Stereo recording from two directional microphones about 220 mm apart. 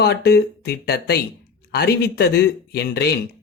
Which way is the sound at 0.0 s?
45° left (ahead or behind).